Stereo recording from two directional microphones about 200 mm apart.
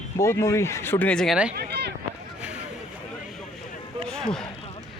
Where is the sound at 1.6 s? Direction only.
55° right (ahead or behind).